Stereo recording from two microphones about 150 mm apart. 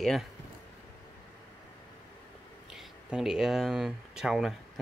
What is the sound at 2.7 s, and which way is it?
Speech, 5° right (ahead or behind).